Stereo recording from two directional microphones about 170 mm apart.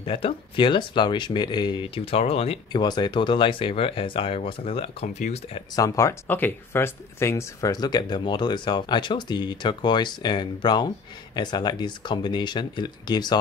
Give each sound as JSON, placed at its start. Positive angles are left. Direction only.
{"t": 0.0, "sound": "speech", "side_deg": 30}
{"t": 5.8, "sound": "speech", "side_deg": 20}